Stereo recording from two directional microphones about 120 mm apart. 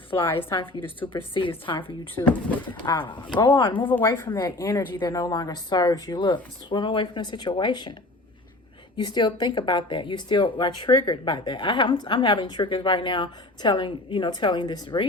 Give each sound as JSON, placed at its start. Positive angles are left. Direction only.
{"t": 0.3, "sound": "speech", "side_deg": 45}
{"t": 2.2, "sound": "speech", "side_deg": 30}
{"t": 3.8, "sound": "speech", "side_deg": 20}
{"t": 4.9, "sound": "speech", "side_deg": 35}
{"t": 9.0, "sound": "speech", "side_deg": 35}